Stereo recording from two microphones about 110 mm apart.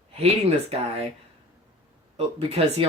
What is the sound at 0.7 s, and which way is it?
Speech, 70° right (ahead or behind).